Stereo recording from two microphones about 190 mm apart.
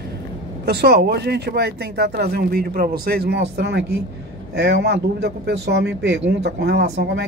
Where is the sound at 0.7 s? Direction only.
60° right (ahead or behind).